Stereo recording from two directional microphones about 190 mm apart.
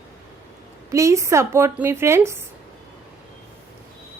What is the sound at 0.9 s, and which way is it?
A woman's voice, 15° right (ahead or behind).